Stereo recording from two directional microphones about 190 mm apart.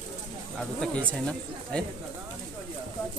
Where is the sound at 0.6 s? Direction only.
5° left (ahead or behind).